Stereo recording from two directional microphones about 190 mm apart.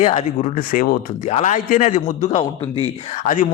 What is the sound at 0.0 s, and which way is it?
A man's voice, 35° left (ahead or behind).